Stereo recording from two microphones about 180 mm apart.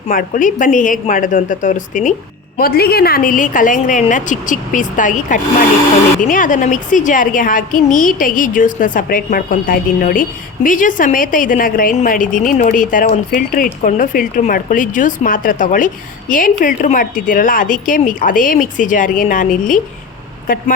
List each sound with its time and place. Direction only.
0.1 s a woman's voice: 50° left (ahead or behind)
2.6 s a woman's voice: 60° left (ahead or behind)